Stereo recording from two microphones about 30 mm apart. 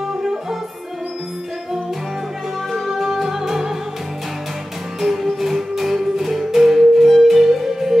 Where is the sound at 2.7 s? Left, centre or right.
Centre.